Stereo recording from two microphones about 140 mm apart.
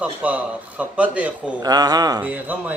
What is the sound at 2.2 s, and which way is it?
Speech, 10° right (ahead or behind).